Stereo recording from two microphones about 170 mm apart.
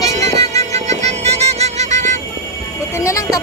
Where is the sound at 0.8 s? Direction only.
40° right (ahead or behind).